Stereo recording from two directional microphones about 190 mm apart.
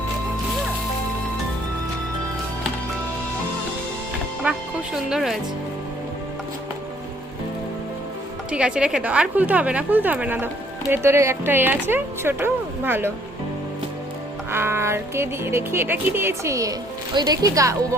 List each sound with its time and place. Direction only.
4.4 s a woman's voice: 5° right (ahead or behind)
8.4 s a woman's voice: 5° right (ahead or behind)
14.5 s a woman's voice: 15° right (ahead or behind)